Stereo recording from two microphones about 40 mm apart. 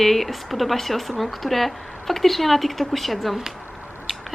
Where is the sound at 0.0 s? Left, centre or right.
Centre.